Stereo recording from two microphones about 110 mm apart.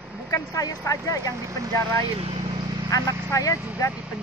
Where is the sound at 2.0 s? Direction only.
60° right (ahead or behind).